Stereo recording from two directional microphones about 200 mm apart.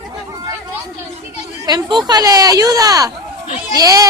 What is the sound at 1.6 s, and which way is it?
Speech, 20° right (ahead or behind).